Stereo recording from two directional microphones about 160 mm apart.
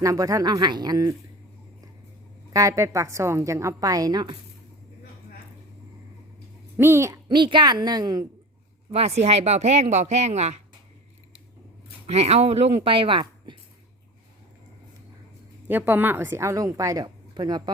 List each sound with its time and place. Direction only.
0.0 s a woman's voice: 20° right (ahead or behind)
2.5 s a woman's voice: 20° right (ahead or behind)
6.7 s speech: 15° right (ahead or behind)
7.3 s a woman's voice: 30° right (ahead or behind)
8.9 s speech: 40° right (ahead or behind)
12.0 s speech: 40° right (ahead or behind)
15.7 s a woman's voice: 10° right (ahead or behind)